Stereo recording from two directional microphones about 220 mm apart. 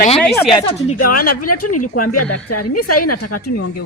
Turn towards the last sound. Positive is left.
turn(degrees=90)